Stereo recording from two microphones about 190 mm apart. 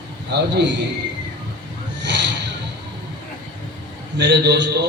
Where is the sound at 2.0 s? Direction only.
70° right (ahead or behind).